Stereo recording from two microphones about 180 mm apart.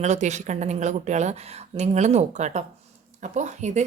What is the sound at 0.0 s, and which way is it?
A woman's voice, 40° right (ahead or behind).